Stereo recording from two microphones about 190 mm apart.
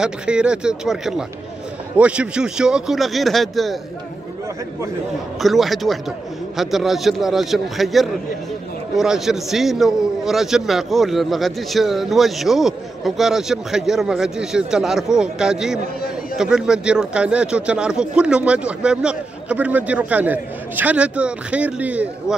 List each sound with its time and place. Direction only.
0.0 s a man's voice: 5° right (ahead or behind)
5.4 s a man's voice: centre (ahead or behind)